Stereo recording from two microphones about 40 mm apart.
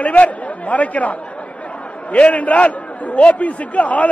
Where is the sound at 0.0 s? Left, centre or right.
Left.